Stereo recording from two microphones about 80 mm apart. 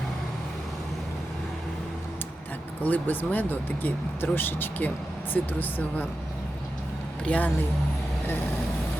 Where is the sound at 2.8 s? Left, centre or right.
Left.